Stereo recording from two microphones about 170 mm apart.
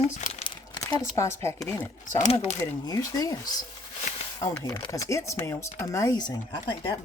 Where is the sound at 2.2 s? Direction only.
40° left (ahead or behind).